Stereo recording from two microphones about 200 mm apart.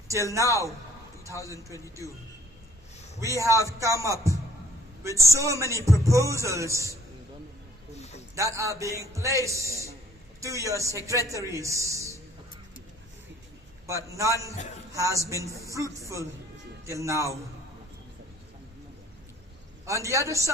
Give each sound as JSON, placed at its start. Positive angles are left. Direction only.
{"t": 0.1, "sound": "speech", "side_deg": -15}
{"t": 3.3, "sound": "speech", "side_deg": -15}
{"t": 7.9, "sound": "a sound", "side_deg": 35}
{"t": 8.4, "sound": "speech", "side_deg": -15}
{"t": 13.8, "sound": "speech", "side_deg": -15}
{"t": 20.1, "sound": "speech", "side_deg": -15}